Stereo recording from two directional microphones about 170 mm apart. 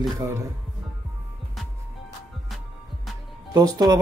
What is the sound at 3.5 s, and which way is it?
Speech, 20° right (ahead or behind).